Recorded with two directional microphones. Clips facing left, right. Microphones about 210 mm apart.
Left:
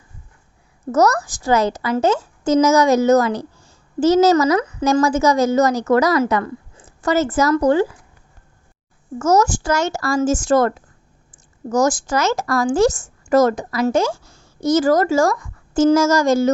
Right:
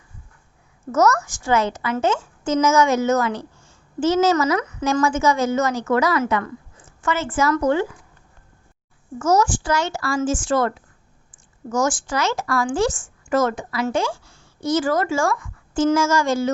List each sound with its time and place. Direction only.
0.9 s a woman's voice: 35° left (ahead or behind)
9.1 s a woman's voice: 40° left (ahead or behind)